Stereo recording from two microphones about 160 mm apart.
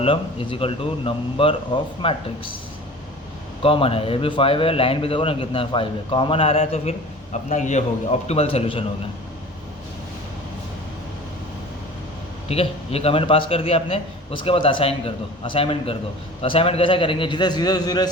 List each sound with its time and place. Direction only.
0.0 s a man's voice: 35° left (ahead or behind)
3.6 s a man's voice: 35° left (ahead or behind)
12.5 s a man's voice: 40° left (ahead or behind)